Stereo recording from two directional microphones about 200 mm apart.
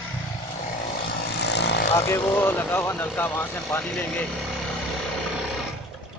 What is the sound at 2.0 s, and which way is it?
Speech, 10° left (ahead or behind).